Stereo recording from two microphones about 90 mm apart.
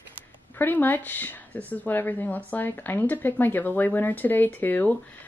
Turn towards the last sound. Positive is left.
turn(degrees=20)  # may be behind; listen again after turning